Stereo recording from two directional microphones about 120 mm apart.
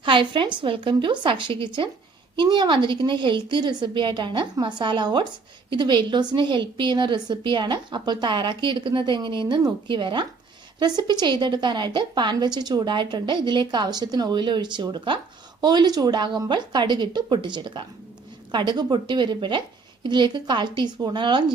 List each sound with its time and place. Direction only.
0.0 s a woman's voice: 45° right (ahead or behind)